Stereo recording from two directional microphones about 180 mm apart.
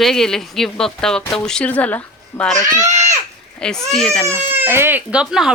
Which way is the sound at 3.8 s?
5° left (ahead or behind).